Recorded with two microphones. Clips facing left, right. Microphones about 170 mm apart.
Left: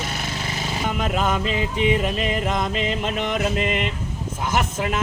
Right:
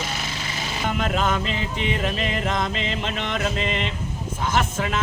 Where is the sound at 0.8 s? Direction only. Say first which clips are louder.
Even; 5° left (ahead or behind).